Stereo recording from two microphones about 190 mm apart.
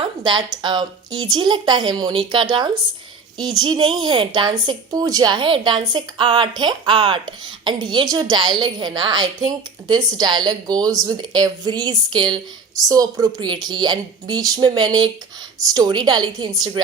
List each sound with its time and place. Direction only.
0.2 s a woman's voice: 25° right (ahead or behind)